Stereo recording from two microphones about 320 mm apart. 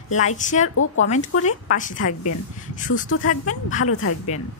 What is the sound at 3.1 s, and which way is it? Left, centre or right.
Speech, left.